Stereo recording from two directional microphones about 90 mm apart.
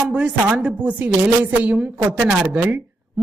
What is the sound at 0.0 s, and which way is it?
A woman's voice, 15° right (ahead or behind).